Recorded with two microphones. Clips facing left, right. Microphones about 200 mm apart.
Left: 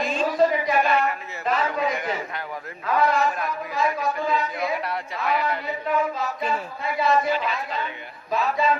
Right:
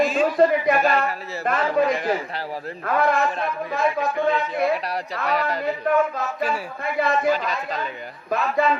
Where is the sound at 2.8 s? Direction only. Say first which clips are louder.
Right 1 dB; 55° right (ahead or behind).